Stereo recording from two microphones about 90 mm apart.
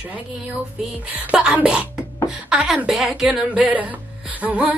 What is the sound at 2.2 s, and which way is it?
Speech, 5° right (ahead or behind).